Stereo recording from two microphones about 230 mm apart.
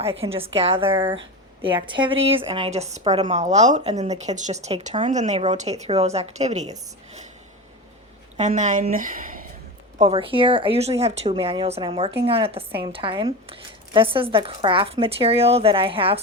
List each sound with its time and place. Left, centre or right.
0.0 s speech: right
0.9 s speech: centre
1.6 s speech: right
8.4 s a woman's voice: right
10.0 s speech: right